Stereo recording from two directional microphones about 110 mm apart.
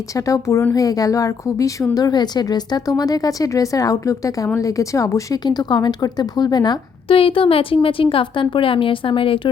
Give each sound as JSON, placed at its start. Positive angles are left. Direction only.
{"t": 0.3, "sound": "a woman's voice", "side_deg": 25}
{"t": 7.1, "sound": "a woman's voice", "side_deg": 55}